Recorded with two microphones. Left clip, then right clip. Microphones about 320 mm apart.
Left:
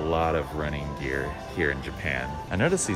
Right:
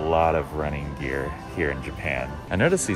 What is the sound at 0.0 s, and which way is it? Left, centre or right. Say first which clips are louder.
Speech: right 4 dB; centre.